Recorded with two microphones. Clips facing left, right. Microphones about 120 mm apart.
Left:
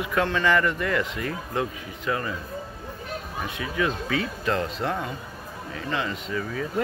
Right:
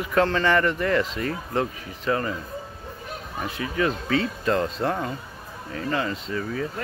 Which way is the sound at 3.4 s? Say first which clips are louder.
Right 2 dB; 30° right (ahead or behind).